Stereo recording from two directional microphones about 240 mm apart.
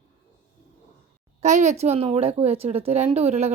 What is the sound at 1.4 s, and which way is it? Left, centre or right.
A woman's voice, right.